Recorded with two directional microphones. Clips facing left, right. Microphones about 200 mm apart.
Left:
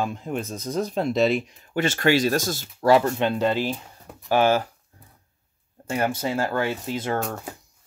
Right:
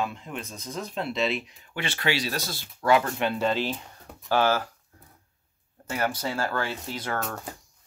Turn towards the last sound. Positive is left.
turn(degrees=20)  # may be behind; listen again after turning